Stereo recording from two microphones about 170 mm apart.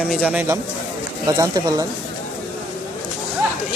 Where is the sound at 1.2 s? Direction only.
20° right (ahead or behind).